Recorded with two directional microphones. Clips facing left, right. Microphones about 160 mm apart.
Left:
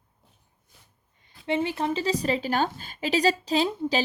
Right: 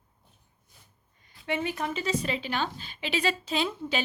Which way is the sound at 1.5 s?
30° left (ahead or behind).